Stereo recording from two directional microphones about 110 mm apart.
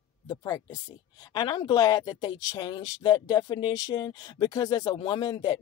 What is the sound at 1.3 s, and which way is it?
Speech, 40° left (ahead or behind).